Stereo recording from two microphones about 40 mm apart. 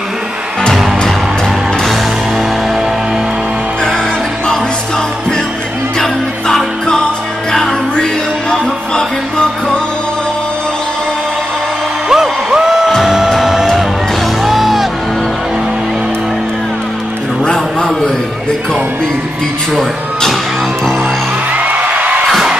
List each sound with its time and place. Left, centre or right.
5.9 s music: centre
12.1 s music: centre
17.5 s a sound: centre
21.5 s music: right